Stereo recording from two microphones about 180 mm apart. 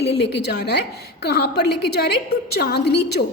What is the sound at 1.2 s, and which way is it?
A woman's voice, 65° left (ahead or behind).